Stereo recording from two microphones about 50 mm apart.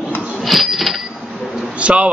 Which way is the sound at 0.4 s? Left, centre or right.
Centre.